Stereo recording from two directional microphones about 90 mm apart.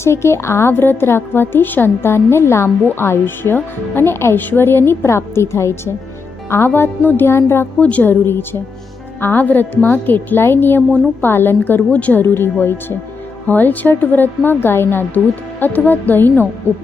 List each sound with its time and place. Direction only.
0.0 s a woman's voice: 30° left (ahead or behind)
7.8 s a woman's voice: 15° left (ahead or behind)
12.2 s a woman's voice: 25° left (ahead or behind)